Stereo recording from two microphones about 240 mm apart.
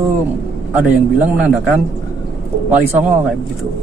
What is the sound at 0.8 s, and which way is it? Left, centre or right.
Speech, centre.